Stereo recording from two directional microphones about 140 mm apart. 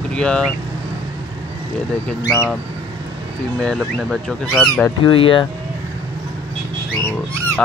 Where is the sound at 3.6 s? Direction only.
5° left (ahead or behind).